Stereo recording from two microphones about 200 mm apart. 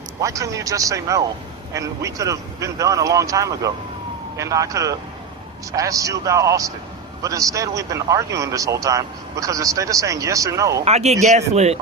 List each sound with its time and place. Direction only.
0.2 s a man's voice: 15° right (ahead or behind)
10.8 s speech: 35° right (ahead or behind)